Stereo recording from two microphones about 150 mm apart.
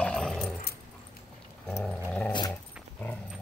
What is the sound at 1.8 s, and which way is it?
Dog, 10° left (ahead or behind).